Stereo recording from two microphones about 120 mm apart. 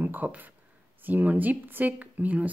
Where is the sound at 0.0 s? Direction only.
15° right (ahead or behind).